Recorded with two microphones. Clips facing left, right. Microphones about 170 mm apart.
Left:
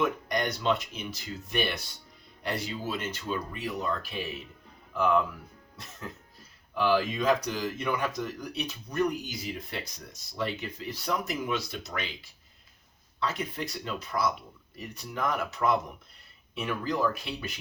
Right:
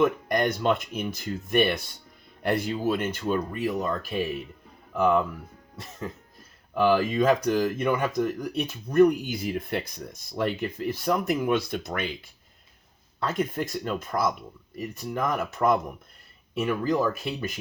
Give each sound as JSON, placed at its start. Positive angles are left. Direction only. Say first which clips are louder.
{"t": 0.3, "sound": "speech", "louder": "right 4 dB", "side_deg": -55}
{"t": 6.7, "sound": "speech", "louder": "right 5 dB", "side_deg": -50}
{"t": 16.8, "sound": "speech", "louder": "right 1 dB", "side_deg": -50}